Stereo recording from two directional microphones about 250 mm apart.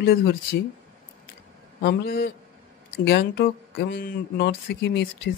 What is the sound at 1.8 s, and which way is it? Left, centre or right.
Speech, left.